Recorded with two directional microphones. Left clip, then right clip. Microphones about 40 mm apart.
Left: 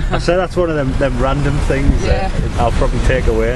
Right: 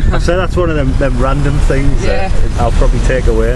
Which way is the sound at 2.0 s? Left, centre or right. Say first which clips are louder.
Right 2 dB; right.